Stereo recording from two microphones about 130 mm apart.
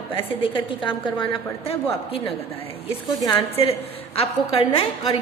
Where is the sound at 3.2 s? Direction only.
40° left (ahead or behind).